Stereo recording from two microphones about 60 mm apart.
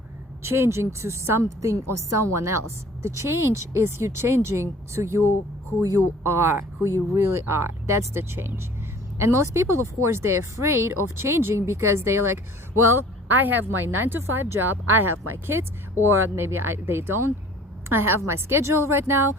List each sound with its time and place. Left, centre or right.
0.4 s speech: right
6.2 s speech: right
6.8 s speech: right
13.2 s speech: right